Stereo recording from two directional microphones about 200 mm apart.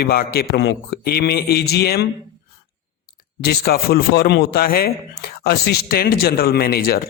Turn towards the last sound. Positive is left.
turn(degrees=50)  # may be behind; listen again after turning